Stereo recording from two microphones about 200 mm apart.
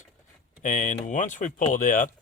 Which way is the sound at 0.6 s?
40° left (ahead or behind).